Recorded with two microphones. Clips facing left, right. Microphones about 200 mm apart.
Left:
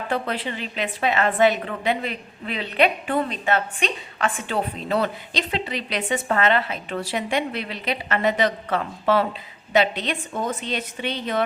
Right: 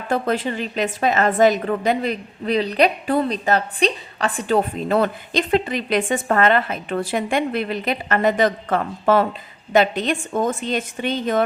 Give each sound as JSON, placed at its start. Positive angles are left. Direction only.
{"t": 0.1, "sound": "a woman's voice", "side_deg": -45}